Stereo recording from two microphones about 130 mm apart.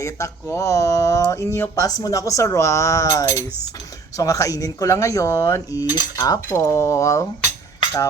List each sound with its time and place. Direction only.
0.0 s speech: 20° left (ahead or behind)